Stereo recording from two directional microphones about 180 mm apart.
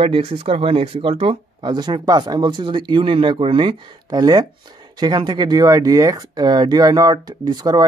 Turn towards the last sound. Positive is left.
turn(degrees=-20)  # may be behind; listen again after turning